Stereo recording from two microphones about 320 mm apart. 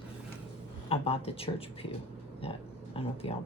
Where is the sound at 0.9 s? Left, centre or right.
Centre.